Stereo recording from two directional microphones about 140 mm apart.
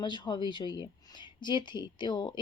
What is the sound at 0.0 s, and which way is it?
A woman's voice, 30° left (ahead or behind).